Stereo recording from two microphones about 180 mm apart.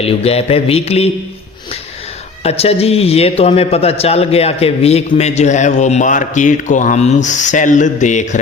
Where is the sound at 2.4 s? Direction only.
35° left (ahead or behind).